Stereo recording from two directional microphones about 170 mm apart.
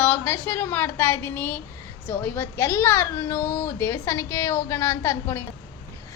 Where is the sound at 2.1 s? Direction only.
10° left (ahead or behind).